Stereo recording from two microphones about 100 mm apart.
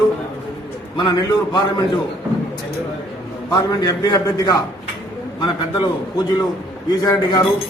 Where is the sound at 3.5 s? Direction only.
40° left (ahead or behind).